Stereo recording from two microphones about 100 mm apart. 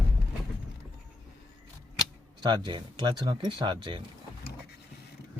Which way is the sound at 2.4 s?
50° right (ahead or behind).